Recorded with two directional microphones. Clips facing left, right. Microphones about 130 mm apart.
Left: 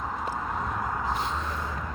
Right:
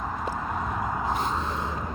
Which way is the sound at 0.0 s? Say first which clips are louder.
Right 1 dB; centre (ahead or behind).